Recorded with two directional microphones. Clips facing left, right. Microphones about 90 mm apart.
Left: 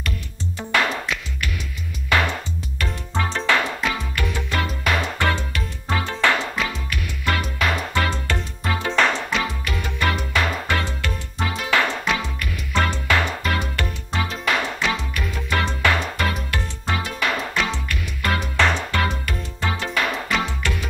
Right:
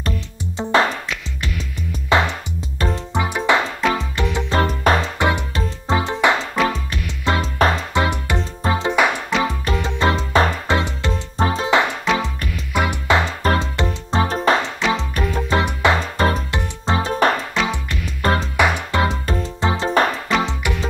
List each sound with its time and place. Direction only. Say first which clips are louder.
0.6 s music: right 5 dB; 25° right (ahead or behind)
2.0 s music: right 3 dB; 25° right (ahead or behind)
3.8 s music: right 5 dB; 30° right (ahead or behind)
4.6 s music: right 6 dB; 35° right (ahead or behind)
5.2 s music: right 3 dB; 25° right (ahead or behind)
6.5 s music: right 7 dB; 40° right (ahead or behind)
6.9 s music: right 3 dB; 25° right (ahead or behind)
7.5 s music: right 9 dB; 35° right (ahead or behind)
7.9 s music: right 3 dB; 20° right (ahead or behind)
12.7 s music: right 3 dB; 15° right (ahead or behind)
13.6 s music: right 4 dB; 25° right (ahead or behind)
14.2 s music: right 5 dB; 35° right (ahead or behind)
17.6 s music: right 3 dB; 25° right (ahead or behind)
18.6 s music: right 1 dB; 15° right (ahead or behind)